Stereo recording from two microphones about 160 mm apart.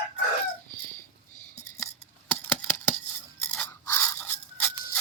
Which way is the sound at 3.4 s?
10° left (ahead or behind).